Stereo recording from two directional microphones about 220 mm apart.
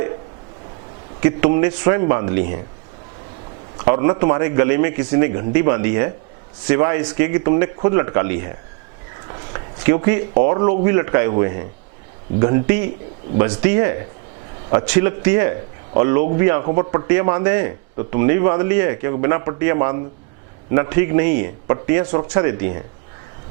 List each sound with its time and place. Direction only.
1.2 s speech: 15° right (ahead or behind)
3.8 s speech: 20° right (ahead or behind)